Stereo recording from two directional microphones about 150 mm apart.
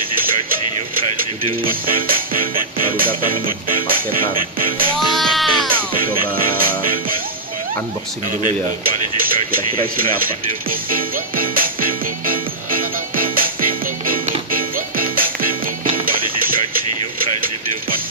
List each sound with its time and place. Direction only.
1.6 s speech: 70° right (ahead or behind)
4.9 s music: centre (ahead or behind)
6.3 s music: 70° right (ahead or behind)
10.7 s music: 70° right (ahead or behind)